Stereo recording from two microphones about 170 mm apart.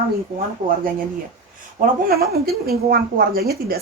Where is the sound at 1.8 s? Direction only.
60° right (ahead or behind).